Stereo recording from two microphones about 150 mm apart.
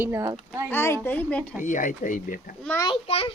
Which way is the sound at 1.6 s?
60° left (ahead or behind).